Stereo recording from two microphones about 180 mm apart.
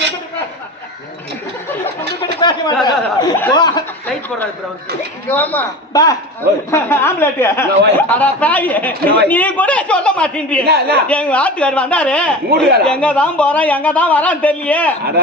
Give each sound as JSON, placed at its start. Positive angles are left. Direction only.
{"t": 2.4, "sound": "a sound", "side_deg": 25}
{"t": 3.5, "sound": "speech", "side_deg": 25}
{"t": 5.3, "sound": "a man's voice", "side_deg": 10}
{"t": 5.9, "sound": "a man's voice", "side_deg": 20}
{"t": 10.7, "sound": "speech", "side_deg": -60}
{"t": 11.1, "sound": "a man's voice", "side_deg": 5}
{"t": 12.5, "sound": "speech", "side_deg": -60}
{"t": 12.8, "sound": "a man's voice", "side_deg": 5}